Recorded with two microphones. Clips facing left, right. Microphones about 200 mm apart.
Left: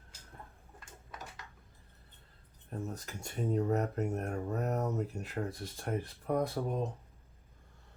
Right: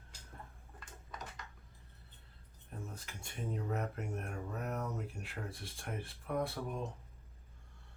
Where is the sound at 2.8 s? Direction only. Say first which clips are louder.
Left 7 dB; 40° left (ahead or behind).